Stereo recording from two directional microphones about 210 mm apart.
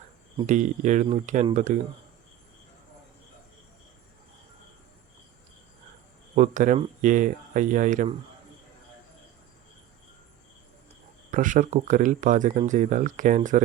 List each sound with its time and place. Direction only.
0.4 s speech: 35° right (ahead or behind)
6.3 s speech: 35° right (ahead or behind)
11.3 s speech: 40° right (ahead or behind)